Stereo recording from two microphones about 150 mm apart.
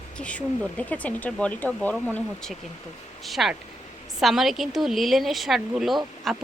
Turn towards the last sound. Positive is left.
turn(degrees=0)  # may be behind; listen again after turning